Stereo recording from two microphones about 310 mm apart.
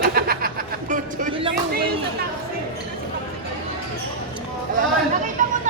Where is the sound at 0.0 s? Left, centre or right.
Right.